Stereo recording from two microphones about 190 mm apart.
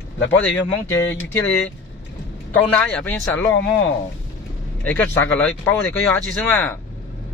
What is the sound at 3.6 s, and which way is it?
Speech, 70° left (ahead or behind).